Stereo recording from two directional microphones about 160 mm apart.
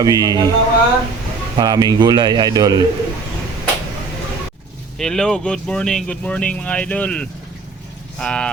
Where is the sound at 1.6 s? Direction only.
25° right (ahead or behind).